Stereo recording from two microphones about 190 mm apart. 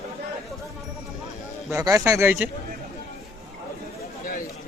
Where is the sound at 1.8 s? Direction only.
15° right (ahead or behind).